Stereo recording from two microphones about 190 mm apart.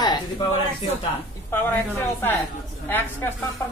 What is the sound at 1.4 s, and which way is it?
Speech, 10° left (ahead or behind).